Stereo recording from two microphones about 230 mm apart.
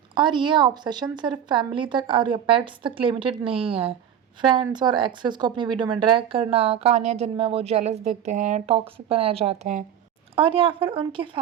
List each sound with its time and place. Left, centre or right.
0.1 s a woman's voice: right